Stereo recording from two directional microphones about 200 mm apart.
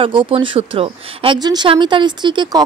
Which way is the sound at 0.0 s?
25° right (ahead or behind).